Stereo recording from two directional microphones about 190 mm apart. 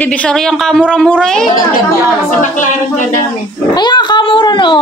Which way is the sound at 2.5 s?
40° left (ahead or behind).